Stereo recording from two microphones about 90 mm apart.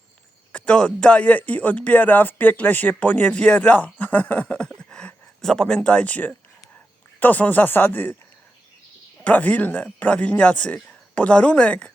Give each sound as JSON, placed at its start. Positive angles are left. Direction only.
{"t": 0.5, "sound": "speech", "side_deg": 15}
{"t": 9.2, "sound": "speech", "side_deg": 15}